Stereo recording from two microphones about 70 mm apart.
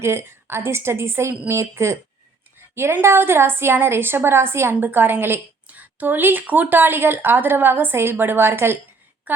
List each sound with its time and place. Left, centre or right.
0.0 s a woman's voice: right